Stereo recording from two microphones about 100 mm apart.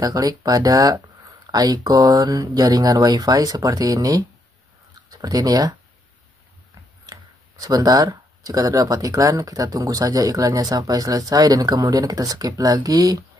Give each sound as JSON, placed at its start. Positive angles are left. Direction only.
{"t": 0.0, "sound": "speech", "side_deg": -40}
{"t": 7.1, "sound": "speech", "side_deg": -35}